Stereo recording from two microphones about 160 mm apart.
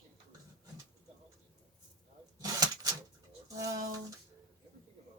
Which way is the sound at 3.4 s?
20° right (ahead or behind).